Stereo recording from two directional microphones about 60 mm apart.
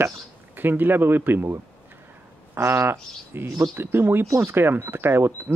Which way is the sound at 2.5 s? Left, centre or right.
Right.